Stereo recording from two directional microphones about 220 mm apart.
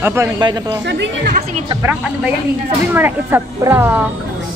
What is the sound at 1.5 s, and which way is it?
Speech, 20° right (ahead or behind).